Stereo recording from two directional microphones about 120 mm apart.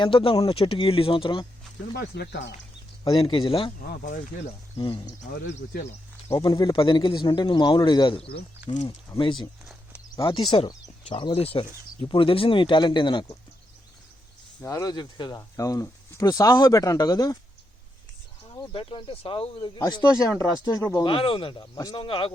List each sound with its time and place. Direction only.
0.0 s speech: 45° left (ahead or behind)
3.0 s speech: 40° left (ahead or behind)
4.3 s speech: 90° left
6.4 s speech: 35° left (ahead or behind)
6.7 s speech: 45° left (ahead or behind)
9.1 s speech: 30° left (ahead or behind)
10.2 s speech: 45° left (ahead or behind)
14.6 s speech: 30° left (ahead or behind)
18.5 s speech: 45° left (ahead or behind); by 21.0 s 30° left (ahead or behind)
21.0 s speech: 45° left (ahead or behind)